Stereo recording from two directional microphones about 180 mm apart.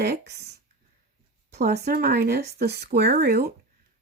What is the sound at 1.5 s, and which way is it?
A woman's voice, 60° right (ahead or behind).